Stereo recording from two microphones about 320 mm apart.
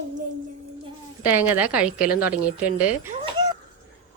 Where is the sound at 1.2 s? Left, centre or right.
Centre.